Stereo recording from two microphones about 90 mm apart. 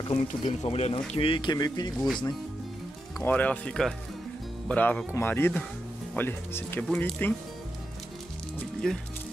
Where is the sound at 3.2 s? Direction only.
15° left (ahead or behind).